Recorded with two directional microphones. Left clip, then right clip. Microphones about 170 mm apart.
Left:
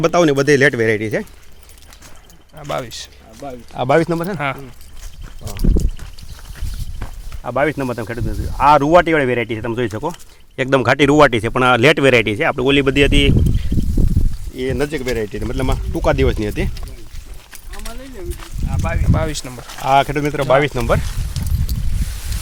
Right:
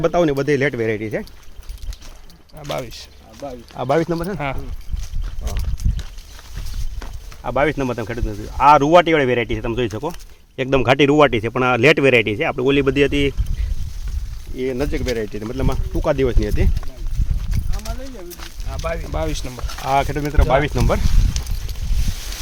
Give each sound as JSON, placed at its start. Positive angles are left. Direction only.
{"t": 0.0, "sound": "speech", "side_deg": 50}
{"t": 2.6, "sound": "speech", "side_deg": 5}
{"t": 3.4, "sound": "speech", "side_deg": 65}
{"t": 4.4, "sound": "speech", "side_deg": 0}
{"t": 7.4, "sound": "speech", "side_deg": 5}
{"t": 14.5, "sound": "speech", "side_deg": 20}
{"t": 15.1, "sound": "speech", "side_deg": 45}
{"t": 17.7, "sound": "clip-clop", "side_deg": -65}
{"t": 19.1, "sound": "speech", "side_deg": 0}
{"t": 19.8, "sound": "speech", "side_deg": 50}
{"t": 20.6, "sound": "speech", "side_deg": 25}